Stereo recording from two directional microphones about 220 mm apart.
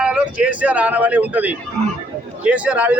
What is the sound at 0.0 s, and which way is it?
A man's voice, 5° right (ahead or behind).